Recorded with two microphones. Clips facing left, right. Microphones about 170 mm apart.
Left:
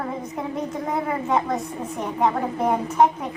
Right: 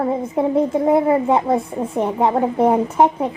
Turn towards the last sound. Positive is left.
turn(degrees=-30)  # may be behind; listen again after turning